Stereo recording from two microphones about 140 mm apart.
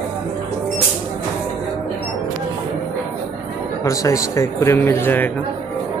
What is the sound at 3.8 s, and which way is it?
Speech, 25° left (ahead or behind).